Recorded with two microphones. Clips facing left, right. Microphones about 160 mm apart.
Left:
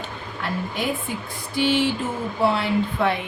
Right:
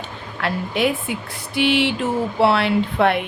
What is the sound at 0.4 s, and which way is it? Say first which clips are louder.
Speech: right 6 dB; 75° right (ahead or behind).